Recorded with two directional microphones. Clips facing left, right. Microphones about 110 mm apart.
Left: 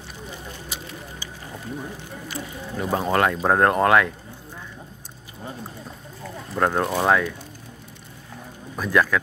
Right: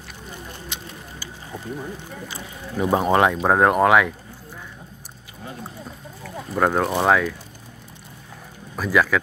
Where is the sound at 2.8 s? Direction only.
20° right (ahead or behind).